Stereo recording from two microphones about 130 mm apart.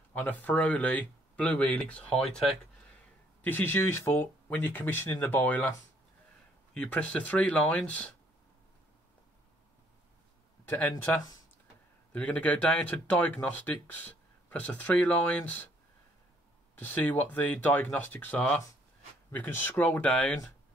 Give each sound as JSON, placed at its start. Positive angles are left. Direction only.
{"t": 0.1, "sound": "speech", "side_deg": 10}
{"t": 3.4, "sound": "speech", "side_deg": 15}
{"t": 6.7, "sound": "speech", "side_deg": 10}
{"t": 10.7, "sound": "speech", "side_deg": 15}
{"t": 16.7, "sound": "speech", "side_deg": 15}